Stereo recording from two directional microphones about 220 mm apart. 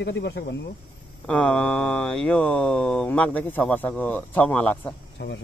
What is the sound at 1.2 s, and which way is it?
Speech, 5° left (ahead or behind).